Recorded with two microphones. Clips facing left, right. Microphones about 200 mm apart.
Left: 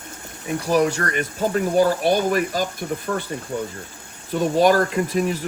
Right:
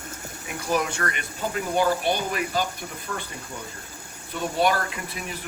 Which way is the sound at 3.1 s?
55° left (ahead or behind).